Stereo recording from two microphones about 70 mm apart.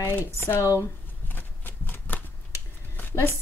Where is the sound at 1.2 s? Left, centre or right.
Left.